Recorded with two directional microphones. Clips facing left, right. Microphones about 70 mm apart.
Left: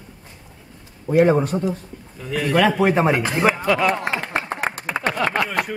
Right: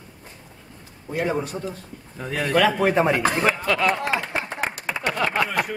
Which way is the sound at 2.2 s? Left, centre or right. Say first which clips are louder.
Left 2 dB; right.